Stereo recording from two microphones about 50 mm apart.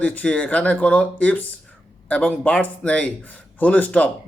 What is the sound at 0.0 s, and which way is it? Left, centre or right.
Speech, left.